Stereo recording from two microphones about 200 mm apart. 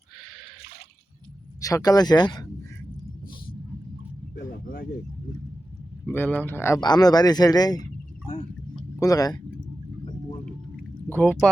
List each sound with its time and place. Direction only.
1.6 s speech: 20° left (ahead or behind)
4.4 s a sound: 45° left (ahead or behind)
6.1 s speech: 10° left (ahead or behind)
9.0 s speech: 20° left (ahead or behind)
11.1 s speech: 10° left (ahead or behind)